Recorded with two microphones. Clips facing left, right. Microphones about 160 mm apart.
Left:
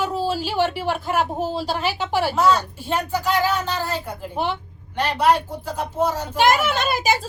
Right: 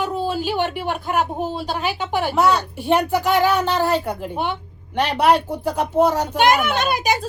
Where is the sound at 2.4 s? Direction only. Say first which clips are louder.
Right 2 dB; 65° right (ahead or behind).